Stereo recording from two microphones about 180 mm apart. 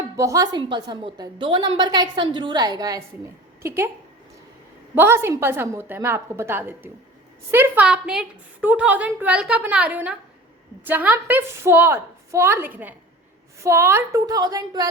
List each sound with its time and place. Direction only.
0.2 s a woman's voice: 20° right (ahead or behind)
4.9 s a woman's voice: 15° right (ahead or behind)